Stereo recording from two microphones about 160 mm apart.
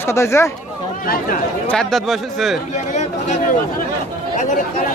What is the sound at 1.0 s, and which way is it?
Speech, 65° left (ahead or behind).